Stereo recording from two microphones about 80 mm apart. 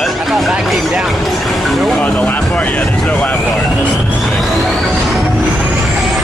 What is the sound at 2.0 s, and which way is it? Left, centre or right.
Vehicle, centre.